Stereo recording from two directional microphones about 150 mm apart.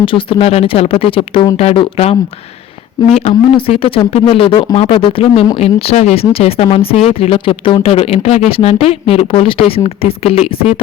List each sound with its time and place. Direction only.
0.0 s speech: 35° left (ahead or behind)